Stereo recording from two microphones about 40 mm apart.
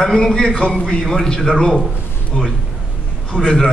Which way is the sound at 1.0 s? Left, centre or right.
Centre.